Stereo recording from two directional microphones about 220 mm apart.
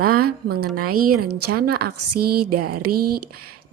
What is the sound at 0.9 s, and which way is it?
Speech, 90° right.